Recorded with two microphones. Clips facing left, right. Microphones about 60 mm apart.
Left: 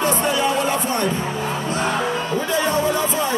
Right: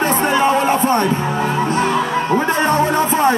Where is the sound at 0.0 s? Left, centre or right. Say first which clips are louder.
Right 4 dB; right.